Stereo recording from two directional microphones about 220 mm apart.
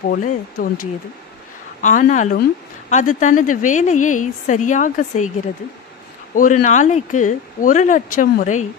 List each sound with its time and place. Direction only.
0.1 s speech: 40° left (ahead or behind)
1.8 s speech: 35° left (ahead or behind)
6.3 s speech: 35° left (ahead or behind)